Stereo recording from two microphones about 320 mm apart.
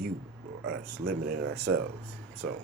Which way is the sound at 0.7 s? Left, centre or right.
Right.